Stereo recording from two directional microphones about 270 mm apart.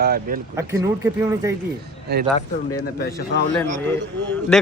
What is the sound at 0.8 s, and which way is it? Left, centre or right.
Speech, centre.